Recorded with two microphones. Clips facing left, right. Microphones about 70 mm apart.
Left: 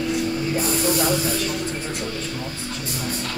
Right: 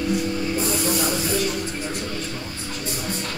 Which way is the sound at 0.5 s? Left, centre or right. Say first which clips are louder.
Left 2 dB; left.